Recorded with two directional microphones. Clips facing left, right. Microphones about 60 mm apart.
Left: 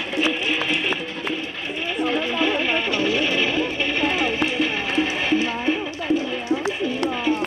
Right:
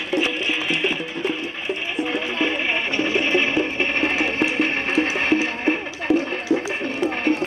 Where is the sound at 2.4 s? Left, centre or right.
Right.